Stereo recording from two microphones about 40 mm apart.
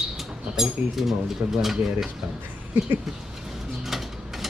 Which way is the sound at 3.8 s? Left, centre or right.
Centre.